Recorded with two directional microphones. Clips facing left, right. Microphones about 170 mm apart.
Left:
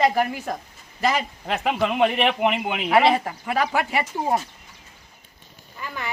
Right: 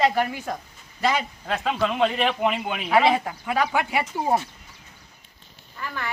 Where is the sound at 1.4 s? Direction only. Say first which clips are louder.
Left 2 dB; 15° left (ahead or behind).